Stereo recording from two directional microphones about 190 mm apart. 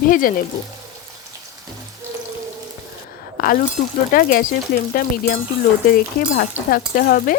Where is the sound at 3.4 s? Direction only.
50° left (ahead or behind).